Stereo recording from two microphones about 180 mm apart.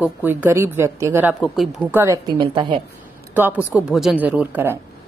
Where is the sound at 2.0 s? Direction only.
20° right (ahead or behind).